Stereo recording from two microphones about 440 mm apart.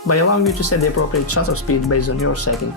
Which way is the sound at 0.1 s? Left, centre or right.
Left.